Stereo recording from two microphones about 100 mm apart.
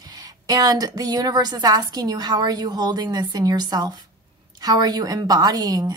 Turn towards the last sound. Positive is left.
turn(degrees=-40)  # may be behind; listen again after turning